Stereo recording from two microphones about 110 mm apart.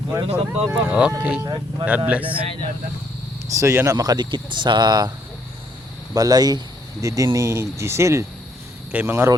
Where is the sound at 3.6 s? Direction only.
25° right (ahead or behind).